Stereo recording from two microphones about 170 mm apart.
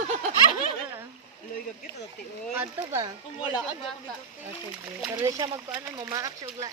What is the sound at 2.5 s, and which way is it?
Speech, 15° right (ahead or behind).